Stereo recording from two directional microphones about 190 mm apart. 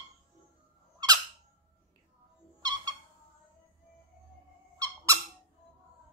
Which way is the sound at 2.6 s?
20° right (ahead or behind).